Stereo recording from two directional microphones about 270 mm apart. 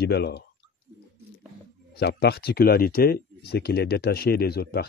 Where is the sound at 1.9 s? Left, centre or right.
Left.